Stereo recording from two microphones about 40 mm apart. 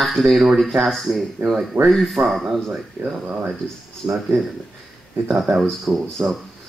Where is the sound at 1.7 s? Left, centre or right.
Right.